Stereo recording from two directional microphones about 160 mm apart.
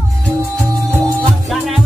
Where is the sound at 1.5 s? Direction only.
Centre (ahead or behind).